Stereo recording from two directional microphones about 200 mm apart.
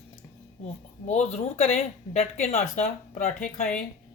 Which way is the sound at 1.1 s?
35° left (ahead or behind).